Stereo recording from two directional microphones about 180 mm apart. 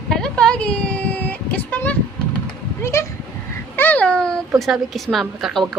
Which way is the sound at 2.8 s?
15° left (ahead or behind).